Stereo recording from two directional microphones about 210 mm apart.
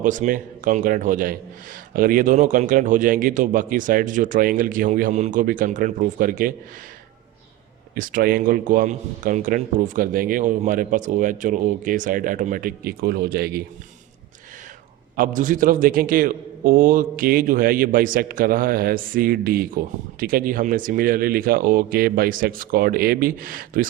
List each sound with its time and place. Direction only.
0.0 s a man's voice: 40° right (ahead or behind)
7.9 s a man's voice: 40° right (ahead or behind)
15.1 s a man's voice: 40° right (ahead or behind)